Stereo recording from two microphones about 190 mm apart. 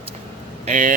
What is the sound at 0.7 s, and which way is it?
Speech, 40° right (ahead or behind).